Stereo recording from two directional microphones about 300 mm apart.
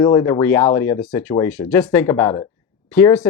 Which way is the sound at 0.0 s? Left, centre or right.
Centre.